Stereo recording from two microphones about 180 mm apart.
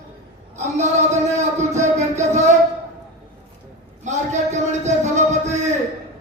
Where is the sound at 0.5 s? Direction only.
40° right (ahead or behind).